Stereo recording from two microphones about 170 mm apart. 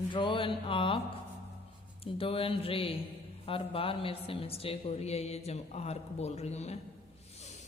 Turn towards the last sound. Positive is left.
turn(degrees=40)  # may be behind; listen again after turning